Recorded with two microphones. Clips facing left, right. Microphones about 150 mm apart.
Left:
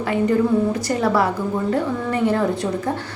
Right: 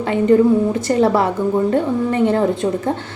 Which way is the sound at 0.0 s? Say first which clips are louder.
Right 5 dB; 25° right (ahead or behind).